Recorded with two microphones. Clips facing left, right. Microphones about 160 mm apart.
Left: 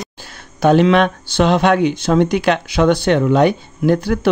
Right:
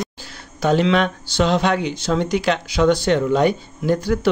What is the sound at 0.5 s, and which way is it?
Speech, 60° left (ahead or behind).